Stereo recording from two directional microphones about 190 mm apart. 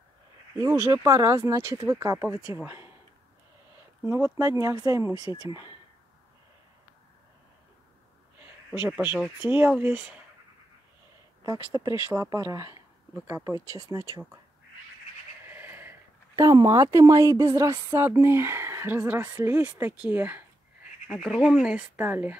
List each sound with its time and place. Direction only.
0.6 s speech: 15° right (ahead or behind)
4.0 s speech: 15° right (ahead or behind)
8.4 s speech: 10° right (ahead or behind)
11.4 s speech: 20° right (ahead or behind)
15.4 s speech: 10° right (ahead or behind)